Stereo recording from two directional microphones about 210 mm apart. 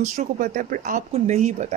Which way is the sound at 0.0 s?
35° right (ahead or behind).